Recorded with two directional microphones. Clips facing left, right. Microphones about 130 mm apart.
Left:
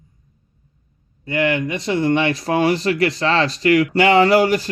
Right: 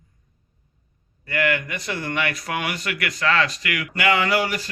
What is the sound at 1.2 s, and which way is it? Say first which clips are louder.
A man's voice: left 4 dB; 20° left (ahead or behind).